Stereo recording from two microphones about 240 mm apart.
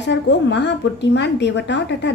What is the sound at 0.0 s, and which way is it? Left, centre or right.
A woman's voice, left.